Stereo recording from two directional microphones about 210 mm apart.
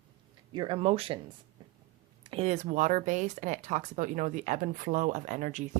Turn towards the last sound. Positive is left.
turn(degrees=-35)  # may be behind; listen again after turning